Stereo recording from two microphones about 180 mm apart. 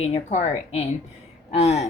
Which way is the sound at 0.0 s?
35° left (ahead or behind).